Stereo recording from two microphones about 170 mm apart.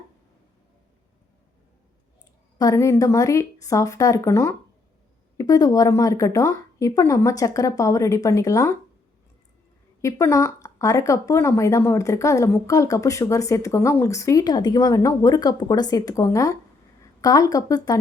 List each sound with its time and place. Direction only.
2.6 s speech: 20° left (ahead or behind)
10.0 s a woman's voice: 15° left (ahead or behind)